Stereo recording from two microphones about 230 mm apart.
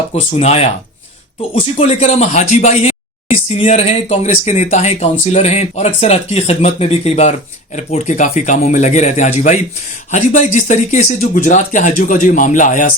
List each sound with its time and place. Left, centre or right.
0.1 s speech: left